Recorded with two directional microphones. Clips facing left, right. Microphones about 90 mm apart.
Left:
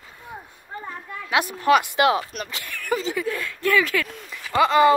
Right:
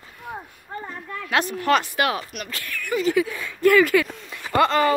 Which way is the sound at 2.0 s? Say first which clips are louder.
Left 4 dB; 25° left (ahead or behind).